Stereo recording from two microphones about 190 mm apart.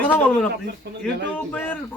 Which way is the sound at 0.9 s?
60° right (ahead or behind).